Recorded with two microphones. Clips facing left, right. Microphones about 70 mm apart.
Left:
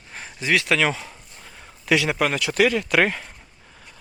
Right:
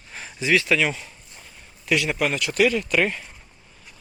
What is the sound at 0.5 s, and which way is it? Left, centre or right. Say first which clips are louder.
Speech: even; left.